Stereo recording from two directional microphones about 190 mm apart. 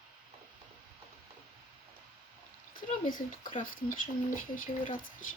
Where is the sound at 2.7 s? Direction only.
45° left (ahead or behind).